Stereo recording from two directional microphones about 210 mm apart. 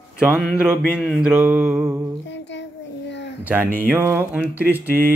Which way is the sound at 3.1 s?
55° left (ahead or behind).